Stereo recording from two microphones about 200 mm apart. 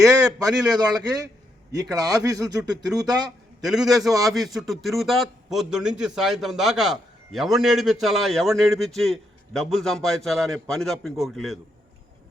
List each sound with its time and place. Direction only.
0.0 s a man's voice: 15° right (ahead or behind)
3.8 s a man's voice: centre (ahead or behind)